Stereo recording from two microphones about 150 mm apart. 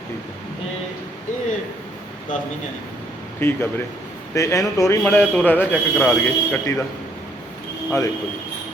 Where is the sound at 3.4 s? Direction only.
15° left (ahead or behind).